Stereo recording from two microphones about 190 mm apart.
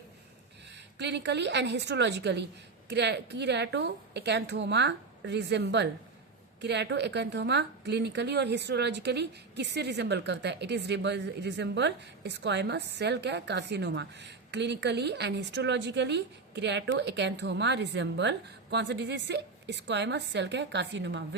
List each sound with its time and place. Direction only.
0.9 s a woman's voice: 65° right (ahead or behind)